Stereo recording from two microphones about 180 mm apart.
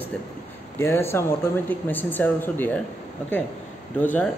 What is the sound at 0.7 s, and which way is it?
A man's voice, 15° left (ahead or behind).